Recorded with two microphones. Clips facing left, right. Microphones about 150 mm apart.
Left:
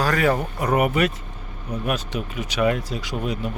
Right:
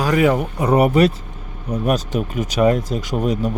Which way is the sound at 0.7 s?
35° right (ahead or behind).